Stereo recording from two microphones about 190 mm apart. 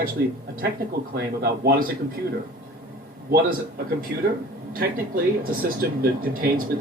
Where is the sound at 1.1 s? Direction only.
55° right (ahead or behind).